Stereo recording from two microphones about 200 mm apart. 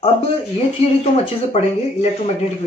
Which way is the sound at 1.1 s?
30° left (ahead or behind).